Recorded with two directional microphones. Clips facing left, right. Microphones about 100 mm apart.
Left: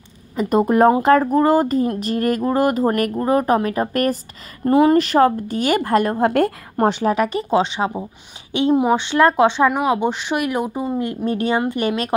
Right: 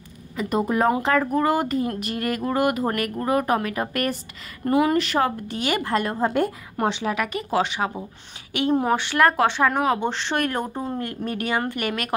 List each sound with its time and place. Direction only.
0.4 s speech: 45° left (ahead or behind)
1.2 s speech: 35° left (ahead or behind)
6.2 s a woman's voice: 90° left
6.8 s speech: 45° left (ahead or behind); by 11.0 s 5° left (ahead or behind)
11.0 s speech: 25° left (ahead or behind)